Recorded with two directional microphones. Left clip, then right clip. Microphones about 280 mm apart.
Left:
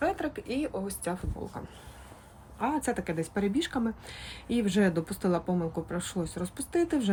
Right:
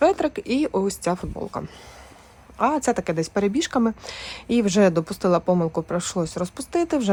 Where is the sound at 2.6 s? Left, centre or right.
Right.